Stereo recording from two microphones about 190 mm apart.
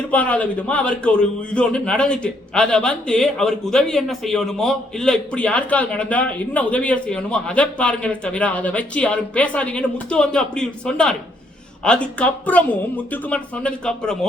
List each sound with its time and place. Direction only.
0.1 s a man's voice: 5° left (ahead or behind)